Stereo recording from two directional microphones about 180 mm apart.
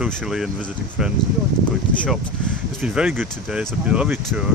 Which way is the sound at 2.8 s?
5° right (ahead or behind).